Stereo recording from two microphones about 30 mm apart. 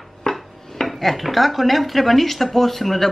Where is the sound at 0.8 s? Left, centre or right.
Centre.